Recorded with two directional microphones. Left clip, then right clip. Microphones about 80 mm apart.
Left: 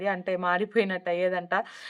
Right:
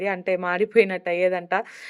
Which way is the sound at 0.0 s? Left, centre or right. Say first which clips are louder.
Right 3 dB; right.